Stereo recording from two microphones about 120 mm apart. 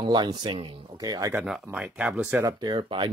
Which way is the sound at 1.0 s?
30° right (ahead or behind).